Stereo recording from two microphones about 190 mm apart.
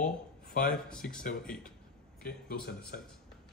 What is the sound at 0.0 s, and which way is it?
Speech, 50° left (ahead or behind).